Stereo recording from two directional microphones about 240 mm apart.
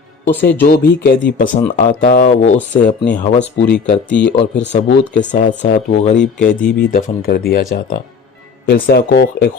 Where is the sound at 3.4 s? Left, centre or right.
Left.